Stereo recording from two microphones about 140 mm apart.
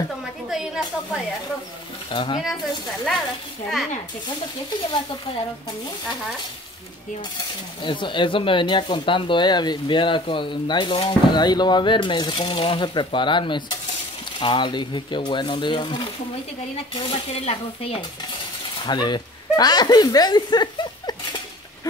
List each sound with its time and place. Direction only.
0.5 s a sound: centre (ahead or behind)
2.0 s speech: 35° left (ahead or behind)
7.3 s speech: 35° left (ahead or behind)
16.9 s stir: 45° left (ahead or behind)
18.9 s speech: 30° left (ahead or behind)